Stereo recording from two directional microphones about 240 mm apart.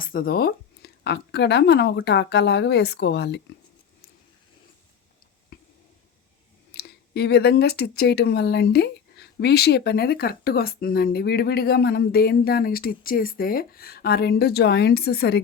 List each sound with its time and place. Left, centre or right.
0.0 s speech: left
5.5 s a sound: left
6.7 s speech: left